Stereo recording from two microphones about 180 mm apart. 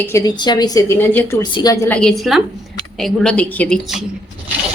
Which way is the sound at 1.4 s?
25° left (ahead or behind).